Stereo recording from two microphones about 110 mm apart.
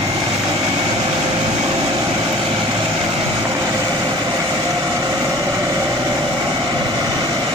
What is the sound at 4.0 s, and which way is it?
Vehicle, 40° right (ahead or behind).